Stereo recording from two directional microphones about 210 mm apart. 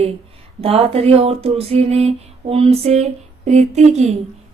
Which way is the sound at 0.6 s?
30° right (ahead or behind).